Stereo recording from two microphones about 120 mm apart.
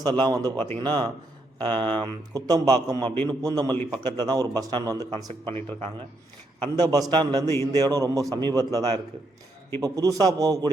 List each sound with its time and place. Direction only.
0.0 s speech: 35° right (ahead or behind)
5.5 s a man's voice: 45° right (ahead or behind)